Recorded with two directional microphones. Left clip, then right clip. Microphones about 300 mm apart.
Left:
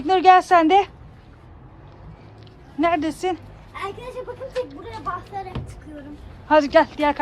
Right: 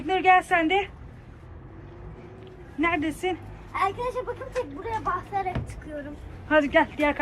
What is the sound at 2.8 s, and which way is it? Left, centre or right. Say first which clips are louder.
Speech: left 5 dB; centre.